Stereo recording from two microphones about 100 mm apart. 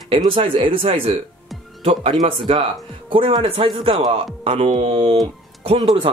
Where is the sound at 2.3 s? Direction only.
60° right (ahead or behind).